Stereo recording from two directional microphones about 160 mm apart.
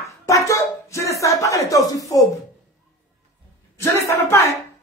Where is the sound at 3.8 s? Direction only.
15° left (ahead or behind).